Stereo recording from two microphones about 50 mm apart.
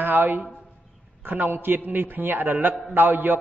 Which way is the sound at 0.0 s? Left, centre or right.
Right.